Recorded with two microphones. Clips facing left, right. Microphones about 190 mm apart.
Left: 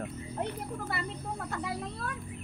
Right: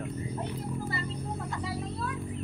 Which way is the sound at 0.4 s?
60° left (ahead or behind).